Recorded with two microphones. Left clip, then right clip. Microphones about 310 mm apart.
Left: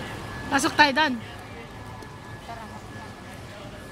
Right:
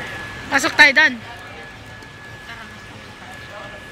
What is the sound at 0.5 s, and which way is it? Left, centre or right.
Speech, centre.